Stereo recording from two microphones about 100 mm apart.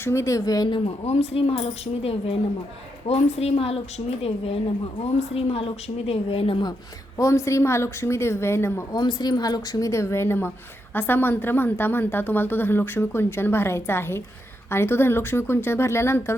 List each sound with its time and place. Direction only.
0.0 s a woman's voice: 25° left (ahead or behind)
0.7 s a woman's voice: 85° left
7.2 s a woman's voice: 30° left (ahead or behind)
8.9 s a woman's voice: 45° left (ahead or behind); by 16.3 s 25° left (ahead or behind)